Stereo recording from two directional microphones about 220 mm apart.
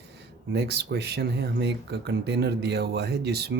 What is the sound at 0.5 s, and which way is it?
Speech, 50° right (ahead or behind).